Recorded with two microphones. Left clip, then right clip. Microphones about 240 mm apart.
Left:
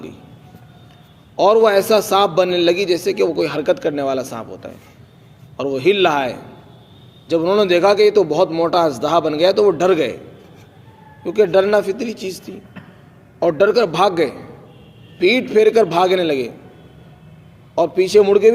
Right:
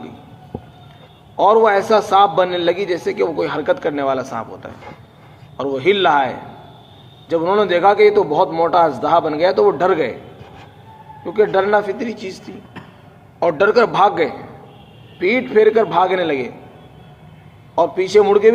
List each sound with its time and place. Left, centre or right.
1.4 s a man's voice: left
11.2 s a man's voice: left
17.7 s a man's voice: left